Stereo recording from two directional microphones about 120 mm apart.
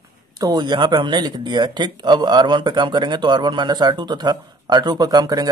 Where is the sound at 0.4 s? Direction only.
35° right (ahead or behind).